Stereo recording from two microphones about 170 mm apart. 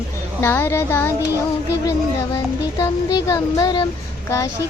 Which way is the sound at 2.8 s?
20° left (ahead or behind).